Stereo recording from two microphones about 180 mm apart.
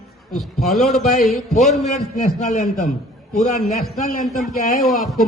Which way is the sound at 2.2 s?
40° left (ahead or behind).